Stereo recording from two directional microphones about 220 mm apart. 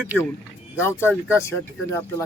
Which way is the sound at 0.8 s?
10° left (ahead or behind).